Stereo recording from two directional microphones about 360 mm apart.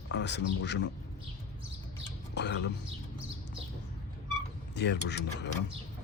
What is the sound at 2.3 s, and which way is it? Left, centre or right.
Speech, left.